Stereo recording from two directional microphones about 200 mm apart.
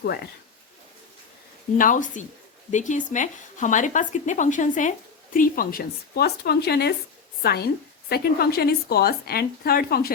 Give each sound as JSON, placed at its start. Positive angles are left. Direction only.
{"t": 1.8, "sound": "a woman's voice", "side_deg": 40}